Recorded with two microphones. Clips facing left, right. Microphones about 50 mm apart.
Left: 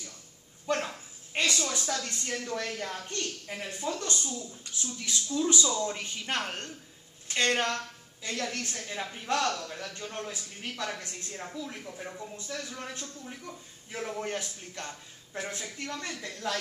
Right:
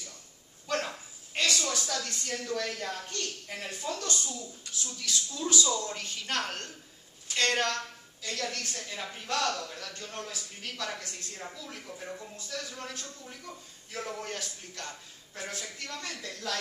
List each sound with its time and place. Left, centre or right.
0.7 s a woman's voice: centre
3.4 s a man's voice: centre
13.2 s a man's voice: centre